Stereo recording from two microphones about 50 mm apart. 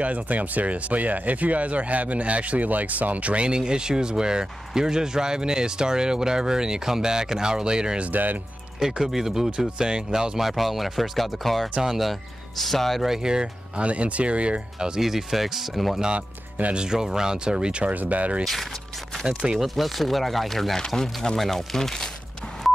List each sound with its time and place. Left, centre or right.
0.0 s speech: right
8.1 s speech: right
8.7 s speech: centre
16.2 s speech: right
16.7 s speech: centre
17.9 s speech: right
18.4 s speech: centre
19.2 s speech: centre
19.6 s speech: centre